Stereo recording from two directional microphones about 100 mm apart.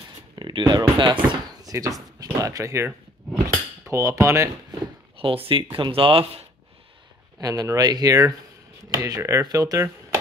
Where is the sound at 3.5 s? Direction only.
30° right (ahead or behind).